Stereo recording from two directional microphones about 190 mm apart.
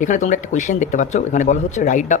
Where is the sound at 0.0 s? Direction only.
40° left (ahead or behind).